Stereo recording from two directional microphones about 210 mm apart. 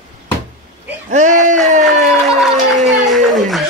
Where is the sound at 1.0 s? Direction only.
35° right (ahead or behind).